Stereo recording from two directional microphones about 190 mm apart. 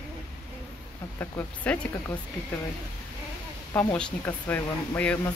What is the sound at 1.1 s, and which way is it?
Speech, 10° left (ahead or behind).